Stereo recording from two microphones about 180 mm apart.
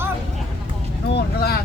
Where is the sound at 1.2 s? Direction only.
60° left (ahead or behind).